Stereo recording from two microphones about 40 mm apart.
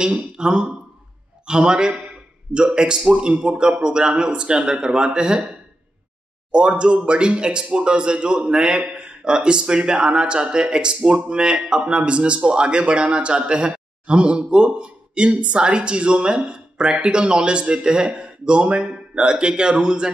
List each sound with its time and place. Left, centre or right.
0.3 s speech: right
6.5 s speech: right